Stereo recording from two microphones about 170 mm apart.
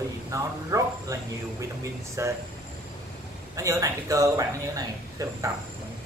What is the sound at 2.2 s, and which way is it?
Speech, 15° right (ahead or behind).